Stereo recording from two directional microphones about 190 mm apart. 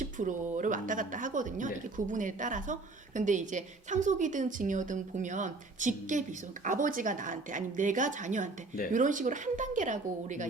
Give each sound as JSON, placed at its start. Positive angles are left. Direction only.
{"t": 0.0, "sound": "a woman's voice", "side_deg": -40}